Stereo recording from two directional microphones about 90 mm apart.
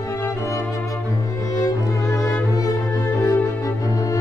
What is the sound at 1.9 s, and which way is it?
Music, 40° left (ahead or behind).